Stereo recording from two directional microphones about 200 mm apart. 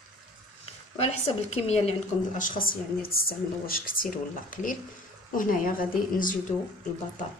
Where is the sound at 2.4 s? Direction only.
45° left (ahead or behind).